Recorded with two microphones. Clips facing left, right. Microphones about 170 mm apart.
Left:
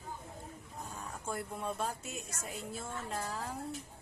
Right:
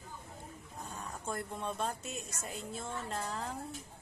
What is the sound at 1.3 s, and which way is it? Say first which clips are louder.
Speech: even; 5° left (ahead or behind).